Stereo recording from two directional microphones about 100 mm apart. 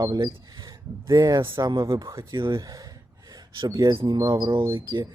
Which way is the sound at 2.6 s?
35° right (ahead or behind).